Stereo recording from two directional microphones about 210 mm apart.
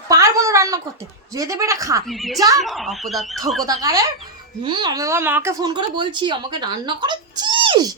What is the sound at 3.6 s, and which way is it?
Speech, 15° right (ahead or behind).